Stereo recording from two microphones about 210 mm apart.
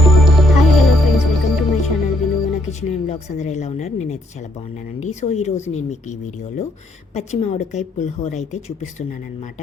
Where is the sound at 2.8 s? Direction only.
35° left (ahead or behind).